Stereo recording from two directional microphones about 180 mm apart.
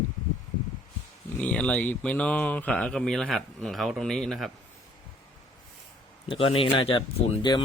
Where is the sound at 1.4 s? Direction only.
5° left (ahead or behind).